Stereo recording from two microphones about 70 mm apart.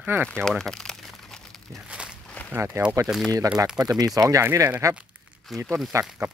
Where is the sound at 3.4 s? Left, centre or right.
Right.